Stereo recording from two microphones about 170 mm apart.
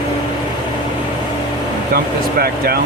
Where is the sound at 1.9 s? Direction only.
60° right (ahead or behind).